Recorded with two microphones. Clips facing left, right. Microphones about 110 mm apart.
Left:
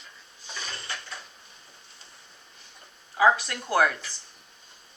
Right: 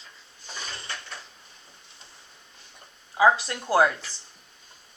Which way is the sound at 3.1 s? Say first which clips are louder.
Right 1 dB; 25° right (ahead or behind).